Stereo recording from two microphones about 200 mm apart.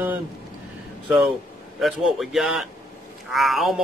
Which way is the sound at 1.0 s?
5° right (ahead or behind).